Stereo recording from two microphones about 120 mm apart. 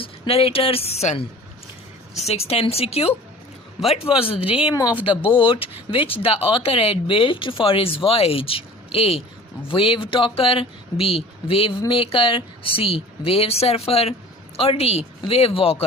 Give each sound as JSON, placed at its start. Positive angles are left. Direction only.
{"t": 0.0, "sound": "a woman's voice", "side_deg": 55}
{"t": 4.7, "sound": "speech", "side_deg": 30}
{"t": 5.2, "sound": "a woman's voice", "side_deg": 45}